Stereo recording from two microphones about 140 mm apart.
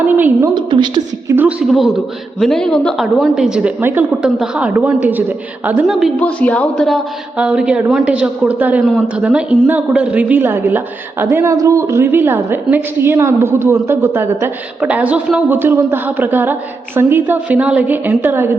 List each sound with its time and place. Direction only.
0.0 s a woman's voice: 15° right (ahead or behind)
0.5 s a woman's voice: 35° right (ahead or behind)
1.4 s a woman's voice: 10° right (ahead or behind)
6.1 s a woman's voice: 10° left (ahead or behind); by 18.5 s 15° right (ahead or behind)